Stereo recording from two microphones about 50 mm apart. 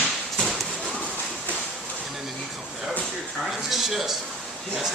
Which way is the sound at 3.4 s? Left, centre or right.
Centre.